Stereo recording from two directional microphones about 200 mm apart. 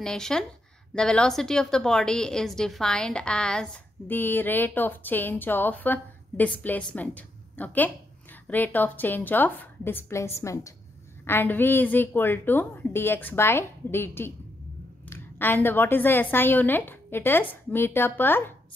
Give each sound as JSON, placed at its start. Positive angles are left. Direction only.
{"t": 0.0, "sound": "a woman's voice", "side_deg": 5}